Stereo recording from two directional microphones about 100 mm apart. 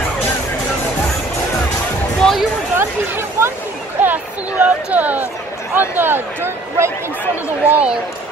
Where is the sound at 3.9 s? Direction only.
15° right (ahead or behind).